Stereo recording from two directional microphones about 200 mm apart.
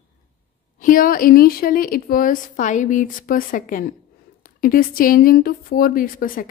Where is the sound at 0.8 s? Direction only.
45° left (ahead or behind).